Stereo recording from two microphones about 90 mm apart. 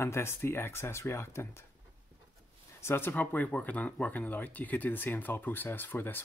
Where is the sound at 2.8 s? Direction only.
25° left (ahead or behind).